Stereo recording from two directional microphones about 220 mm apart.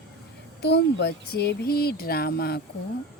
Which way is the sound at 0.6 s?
50° left (ahead or behind).